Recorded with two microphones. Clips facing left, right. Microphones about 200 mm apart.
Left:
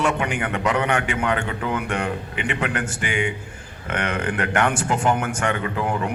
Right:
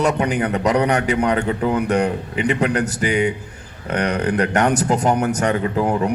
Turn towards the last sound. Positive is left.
turn(degrees=-35)  # may be behind; listen again after turning